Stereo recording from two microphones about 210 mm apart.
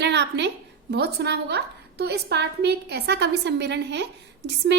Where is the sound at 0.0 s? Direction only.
55° right (ahead or behind).